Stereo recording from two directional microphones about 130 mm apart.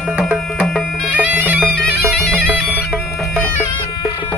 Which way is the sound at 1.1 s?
15° right (ahead or behind).